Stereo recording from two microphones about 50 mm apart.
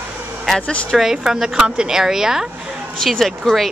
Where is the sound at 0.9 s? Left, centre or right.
Centre.